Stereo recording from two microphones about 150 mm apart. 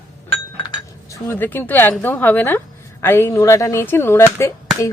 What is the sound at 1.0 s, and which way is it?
Speech, 20° left (ahead or behind).